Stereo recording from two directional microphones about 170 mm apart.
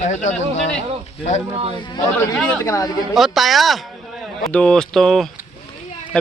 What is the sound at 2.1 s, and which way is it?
Speech, 5° left (ahead or behind).